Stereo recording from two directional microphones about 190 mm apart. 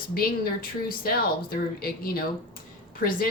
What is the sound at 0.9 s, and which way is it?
A woman's voice, 50° left (ahead or behind).